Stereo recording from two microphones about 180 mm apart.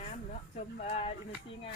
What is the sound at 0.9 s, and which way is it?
Speech, 35° left (ahead or behind).